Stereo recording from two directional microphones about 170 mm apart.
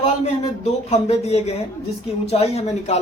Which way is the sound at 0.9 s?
40° left (ahead or behind).